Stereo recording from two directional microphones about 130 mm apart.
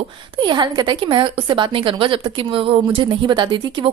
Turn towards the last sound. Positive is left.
turn(degrees=-35)  # may be behind; listen again after turning